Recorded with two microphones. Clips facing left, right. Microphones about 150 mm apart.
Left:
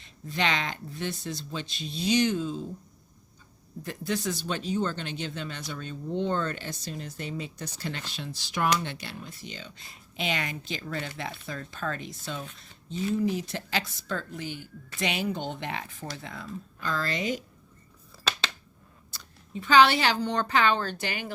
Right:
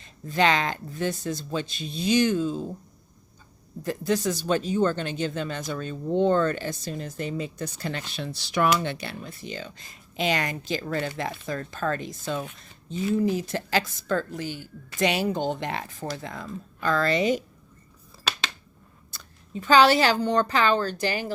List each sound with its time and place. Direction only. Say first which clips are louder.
0.0 s speech: right 7 dB; 45° right (ahead or behind)
3.8 s speech: right 6 dB; 40° right (ahead or behind)
16.9 s a woman's voice: right 7 dB; 65° right (ahead or behind)
19.1 s a woman's voice: right 2 dB; 40° right (ahead or behind)